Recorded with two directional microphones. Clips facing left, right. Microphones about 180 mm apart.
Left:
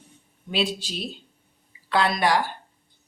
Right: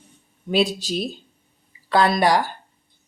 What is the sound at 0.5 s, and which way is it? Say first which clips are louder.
Speech: right 6 dB; 45° right (ahead or behind).